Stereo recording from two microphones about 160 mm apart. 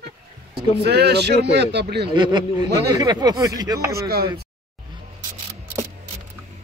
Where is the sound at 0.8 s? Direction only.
90° right.